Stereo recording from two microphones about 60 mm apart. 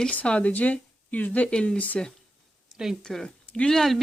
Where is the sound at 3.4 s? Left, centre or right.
Left.